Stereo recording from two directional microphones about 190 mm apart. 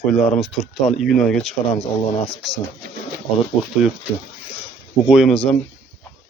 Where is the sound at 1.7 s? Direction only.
35° left (ahead or behind).